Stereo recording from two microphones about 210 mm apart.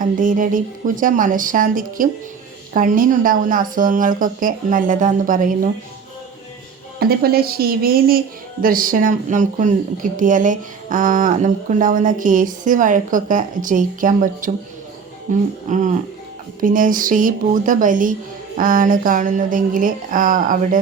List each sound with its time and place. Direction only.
0.0 s speech: 40° right (ahead or behind)
7.0 s speech: 45° right (ahead or behind)